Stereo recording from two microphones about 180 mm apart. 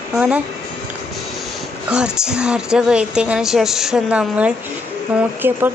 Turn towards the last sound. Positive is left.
turn(degrees=-10)  # may be behind; listen again after turning